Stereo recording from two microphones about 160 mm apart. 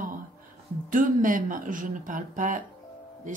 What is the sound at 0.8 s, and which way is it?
Speech, 60° right (ahead or behind).